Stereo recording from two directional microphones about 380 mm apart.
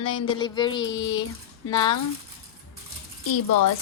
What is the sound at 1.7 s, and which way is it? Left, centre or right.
Speech, centre.